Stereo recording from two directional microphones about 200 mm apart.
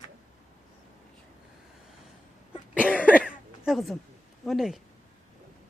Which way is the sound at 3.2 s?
5° right (ahead or behind).